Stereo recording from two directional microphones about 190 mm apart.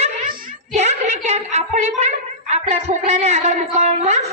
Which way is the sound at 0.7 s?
35° right (ahead or behind).